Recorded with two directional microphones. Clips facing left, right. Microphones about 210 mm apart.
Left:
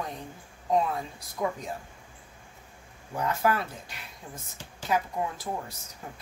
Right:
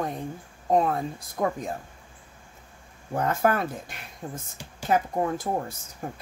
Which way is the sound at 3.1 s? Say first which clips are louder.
Right 3 dB; 50° right (ahead or behind).